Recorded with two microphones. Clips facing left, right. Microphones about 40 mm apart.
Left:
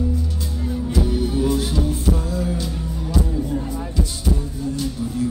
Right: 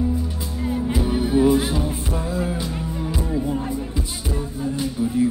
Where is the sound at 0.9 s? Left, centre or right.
Centre.